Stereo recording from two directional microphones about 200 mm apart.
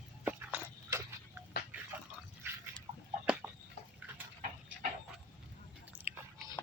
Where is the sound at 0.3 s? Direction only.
10° right (ahead or behind).